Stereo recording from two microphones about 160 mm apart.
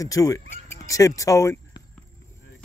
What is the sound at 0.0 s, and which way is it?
Speech, 20° left (ahead or behind).